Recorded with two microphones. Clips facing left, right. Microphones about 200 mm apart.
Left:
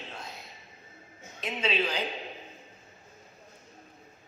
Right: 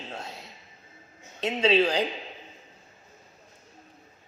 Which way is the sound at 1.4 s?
35° right (ahead or behind).